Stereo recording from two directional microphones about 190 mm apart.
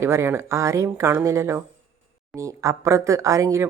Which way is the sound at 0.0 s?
15° right (ahead or behind).